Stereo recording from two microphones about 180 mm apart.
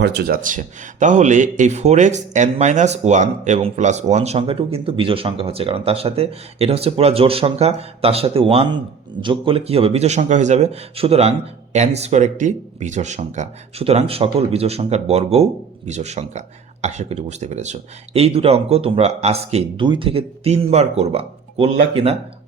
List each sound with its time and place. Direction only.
0.0 s speech: 70° right (ahead or behind)
0.4 s speech: 45° right (ahead or behind)